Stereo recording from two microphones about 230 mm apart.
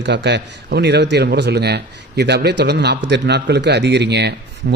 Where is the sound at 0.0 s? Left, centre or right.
Right.